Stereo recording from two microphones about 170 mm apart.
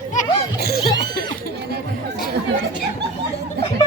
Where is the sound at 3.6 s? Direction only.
80° right.